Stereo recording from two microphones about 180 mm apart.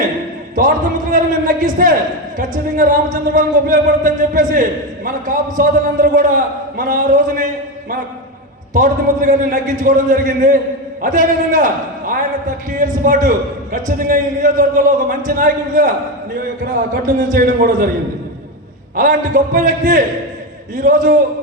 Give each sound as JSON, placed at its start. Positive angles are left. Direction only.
{"t": 0.5, "sound": "a sound", "side_deg": -45}
{"t": 2.4, "sound": "speech", "side_deg": -45}
{"t": 18.9, "sound": "speech", "side_deg": -50}